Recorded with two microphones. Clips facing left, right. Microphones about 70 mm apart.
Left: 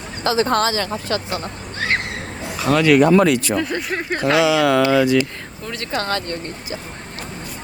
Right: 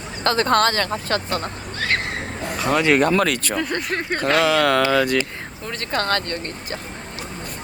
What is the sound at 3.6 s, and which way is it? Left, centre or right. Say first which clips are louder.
Speech: left 1 dB; centre.